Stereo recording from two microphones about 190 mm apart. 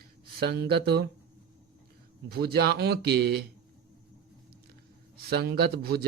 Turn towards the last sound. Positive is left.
turn(degrees=-55)  # may be behind; listen again after turning